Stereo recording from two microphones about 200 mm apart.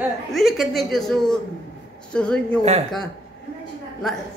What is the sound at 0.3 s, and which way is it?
A man's voice, centre (ahead or behind).